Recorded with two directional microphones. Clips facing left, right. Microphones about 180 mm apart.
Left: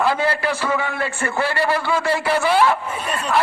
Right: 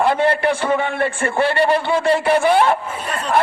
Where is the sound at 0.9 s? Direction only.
55° right (ahead or behind).